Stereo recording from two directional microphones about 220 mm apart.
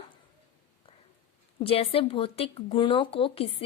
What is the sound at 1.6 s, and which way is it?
A woman's voice, 25° left (ahead or behind).